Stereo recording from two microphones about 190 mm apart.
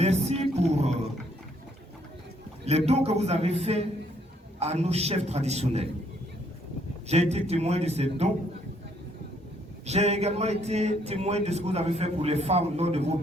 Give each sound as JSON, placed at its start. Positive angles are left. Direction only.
{"t": 0.0, "sound": "speech", "side_deg": -35}
{"t": 2.6, "sound": "speech", "side_deg": -35}
{"t": 7.1, "sound": "speech", "side_deg": -35}
{"t": 9.8, "sound": "speech", "side_deg": -35}